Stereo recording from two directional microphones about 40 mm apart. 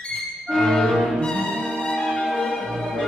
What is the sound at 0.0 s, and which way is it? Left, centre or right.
Music, centre.